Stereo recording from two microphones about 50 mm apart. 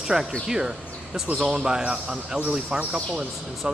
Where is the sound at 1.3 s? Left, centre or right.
Centre.